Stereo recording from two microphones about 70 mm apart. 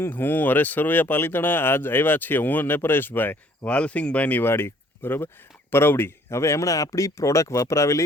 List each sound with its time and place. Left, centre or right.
0.0 s speech: left